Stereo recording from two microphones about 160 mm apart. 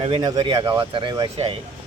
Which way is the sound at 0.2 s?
25° right (ahead or behind).